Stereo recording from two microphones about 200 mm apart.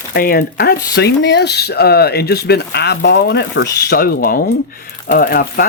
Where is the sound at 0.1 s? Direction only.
50° left (ahead or behind).